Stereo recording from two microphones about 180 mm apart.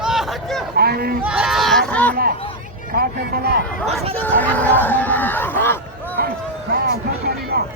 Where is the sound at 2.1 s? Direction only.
55° right (ahead or behind).